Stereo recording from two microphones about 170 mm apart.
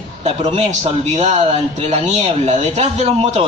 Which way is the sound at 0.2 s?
40° right (ahead or behind).